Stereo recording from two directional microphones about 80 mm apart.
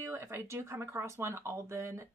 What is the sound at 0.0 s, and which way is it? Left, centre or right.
Speech, right.